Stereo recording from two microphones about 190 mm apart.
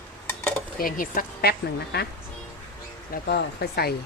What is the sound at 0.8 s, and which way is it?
A woman's voice, 50° left (ahead or behind).